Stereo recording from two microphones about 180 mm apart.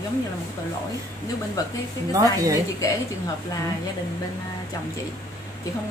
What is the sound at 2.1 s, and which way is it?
Speech, 20° right (ahead or behind).